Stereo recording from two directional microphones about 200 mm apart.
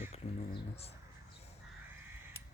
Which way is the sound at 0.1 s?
30° left (ahead or behind).